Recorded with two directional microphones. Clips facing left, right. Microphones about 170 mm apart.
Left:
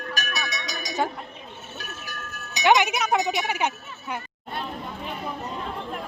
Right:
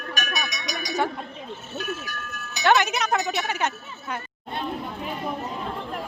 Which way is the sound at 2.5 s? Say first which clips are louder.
Left 1 dB; 15° left (ahead or behind).